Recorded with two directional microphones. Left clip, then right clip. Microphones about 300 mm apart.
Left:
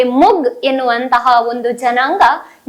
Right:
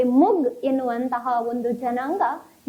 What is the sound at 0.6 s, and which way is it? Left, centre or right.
A woman's voice, centre.